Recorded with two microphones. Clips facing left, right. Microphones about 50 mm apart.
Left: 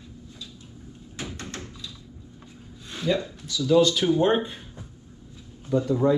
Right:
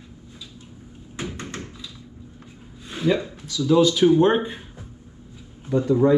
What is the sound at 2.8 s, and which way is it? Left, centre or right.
Speech, centre.